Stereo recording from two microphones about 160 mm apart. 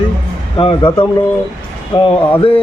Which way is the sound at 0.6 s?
30° left (ahead or behind).